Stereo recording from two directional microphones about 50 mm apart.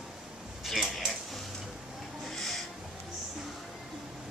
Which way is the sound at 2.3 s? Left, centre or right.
Centre.